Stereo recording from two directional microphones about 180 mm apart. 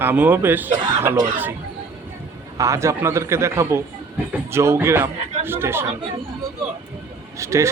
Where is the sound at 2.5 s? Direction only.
15° right (ahead or behind).